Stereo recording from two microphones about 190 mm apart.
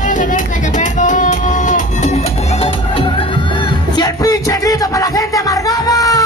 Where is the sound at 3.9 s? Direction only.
20° left (ahead or behind).